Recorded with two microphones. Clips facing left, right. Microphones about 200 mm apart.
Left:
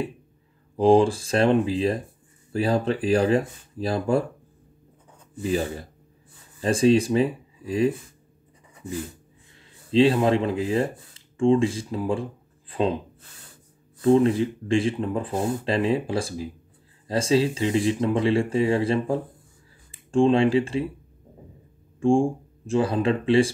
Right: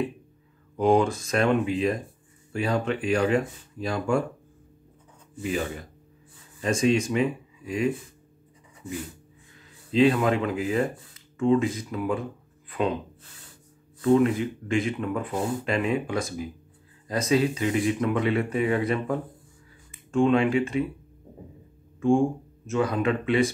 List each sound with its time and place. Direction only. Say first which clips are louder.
0.7 s speech: left 4 dB; 30° left (ahead or behind)
5.4 s speech: left 3 dB; 35° left (ahead or behind)
9.8 s speech: left 2 dB; 30° left (ahead or behind)
14.0 s speech: left 2 dB; 30° left (ahead or behind)
22.0 s speech: left 1 dB; 30° left (ahead or behind)